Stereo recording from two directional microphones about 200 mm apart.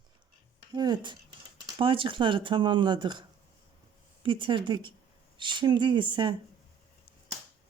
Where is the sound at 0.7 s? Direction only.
20° right (ahead or behind).